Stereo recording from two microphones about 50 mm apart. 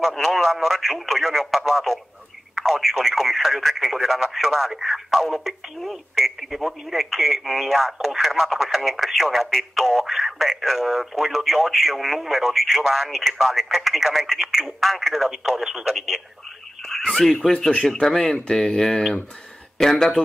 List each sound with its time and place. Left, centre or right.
0.0 s speech: centre
17.1 s speech: centre
17.5 s speech: centre